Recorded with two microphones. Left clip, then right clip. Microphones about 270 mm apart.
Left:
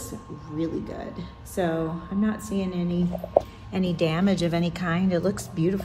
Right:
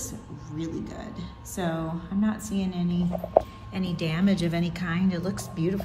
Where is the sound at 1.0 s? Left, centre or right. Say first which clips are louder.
Left 3 dB; centre.